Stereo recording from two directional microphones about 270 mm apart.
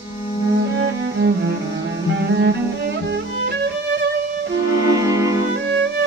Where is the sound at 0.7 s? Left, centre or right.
Right.